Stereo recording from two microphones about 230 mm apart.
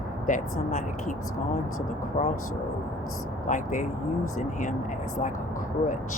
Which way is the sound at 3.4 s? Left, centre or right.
Left.